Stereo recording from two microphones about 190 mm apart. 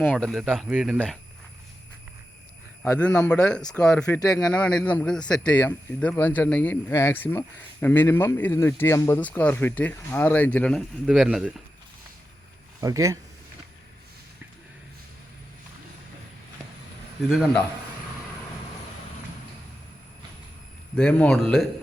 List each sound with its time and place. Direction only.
0.0 s a man's voice: 5° left (ahead or behind)
0.9 s a man's voice: 5° left (ahead or behind)
2.8 s a man's voice: 5° left (ahead or behind)
4.0 s a man's voice: 15° left (ahead or behind)
4.4 s a man's voice: 5° left (ahead or behind)
12.8 s speech: 15° right (ahead or behind)
17.2 s a man's voice: centre (ahead or behind)
20.9 s a man's voice: 5° left (ahead or behind)